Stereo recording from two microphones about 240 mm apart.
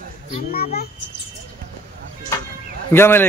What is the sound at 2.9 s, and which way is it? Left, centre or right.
Speech, centre.